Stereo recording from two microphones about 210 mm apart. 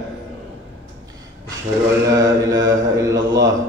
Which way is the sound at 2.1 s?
15° right (ahead or behind).